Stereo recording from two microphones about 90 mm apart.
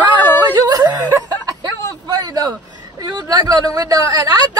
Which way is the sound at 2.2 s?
40° right (ahead or behind).